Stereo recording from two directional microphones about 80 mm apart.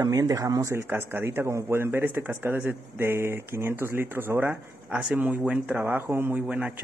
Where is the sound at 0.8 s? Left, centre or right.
Right.